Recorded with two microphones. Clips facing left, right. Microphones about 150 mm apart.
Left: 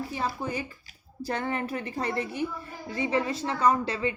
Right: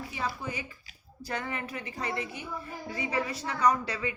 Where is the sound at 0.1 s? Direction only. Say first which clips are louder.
Left 4 dB; 35° left (ahead or behind).